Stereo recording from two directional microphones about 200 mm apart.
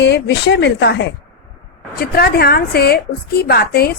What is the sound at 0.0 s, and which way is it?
A woman's voice, 55° left (ahead or behind).